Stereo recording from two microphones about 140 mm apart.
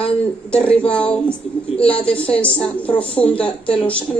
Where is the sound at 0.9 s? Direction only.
10° left (ahead or behind).